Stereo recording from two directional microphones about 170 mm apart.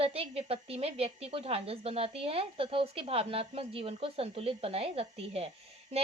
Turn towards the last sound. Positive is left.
turn(degrees=-35)  # may be behind; listen again after turning